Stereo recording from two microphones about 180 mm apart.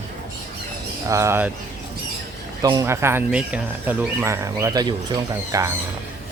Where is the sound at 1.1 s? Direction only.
15° right (ahead or behind).